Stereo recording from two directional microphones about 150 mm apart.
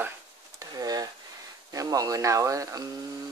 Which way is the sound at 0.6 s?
25° right (ahead or behind).